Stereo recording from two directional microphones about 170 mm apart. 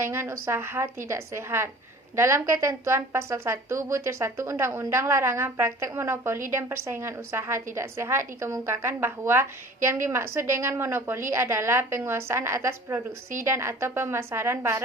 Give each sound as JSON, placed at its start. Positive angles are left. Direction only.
{"t": 0.0, "sound": "a woman's voice", "side_deg": -15}